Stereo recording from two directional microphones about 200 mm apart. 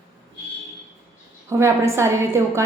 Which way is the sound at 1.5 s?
15° right (ahead or behind).